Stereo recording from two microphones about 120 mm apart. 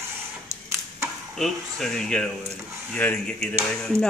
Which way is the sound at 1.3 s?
Centre (ahead or behind).